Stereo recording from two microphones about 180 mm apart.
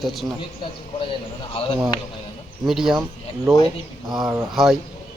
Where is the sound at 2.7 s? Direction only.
Centre (ahead or behind).